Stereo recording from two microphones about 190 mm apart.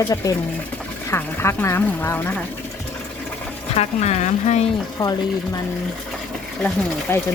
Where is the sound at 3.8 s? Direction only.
35° left (ahead or behind).